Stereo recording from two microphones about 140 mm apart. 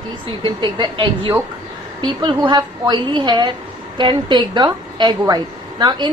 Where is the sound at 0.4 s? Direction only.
35° right (ahead or behind).